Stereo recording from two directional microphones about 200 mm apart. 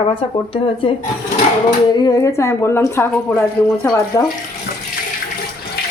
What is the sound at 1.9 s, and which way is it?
Speech, 20° left (ahead or behind).